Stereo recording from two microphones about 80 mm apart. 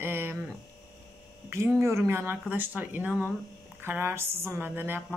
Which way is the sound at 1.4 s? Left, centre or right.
Right.